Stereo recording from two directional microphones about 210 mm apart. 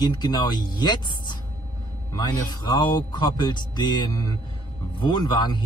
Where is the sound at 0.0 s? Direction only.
20° left (ahead or behind).